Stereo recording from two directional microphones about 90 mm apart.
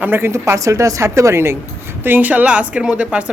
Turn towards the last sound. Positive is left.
turn(degrees=-15)  # may be behind; listen again after turning